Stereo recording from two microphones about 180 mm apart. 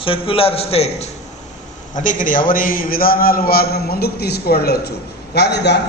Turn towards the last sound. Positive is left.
turn(degrees=70)  # may be behind; listen again after turning